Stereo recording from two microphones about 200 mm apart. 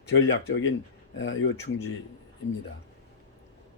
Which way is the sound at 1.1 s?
75° left (ahead or behind).